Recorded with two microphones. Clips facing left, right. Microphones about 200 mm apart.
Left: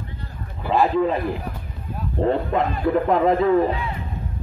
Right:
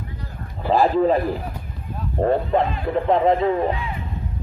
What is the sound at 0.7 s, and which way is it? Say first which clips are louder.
Speech: right 2 dB; 35° right (ahead or behind).